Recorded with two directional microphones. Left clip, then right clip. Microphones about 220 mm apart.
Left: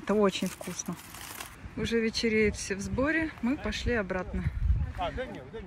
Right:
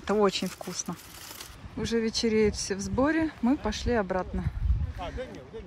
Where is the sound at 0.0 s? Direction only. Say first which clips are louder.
Right 2 dB; 5° right (ahead or behind).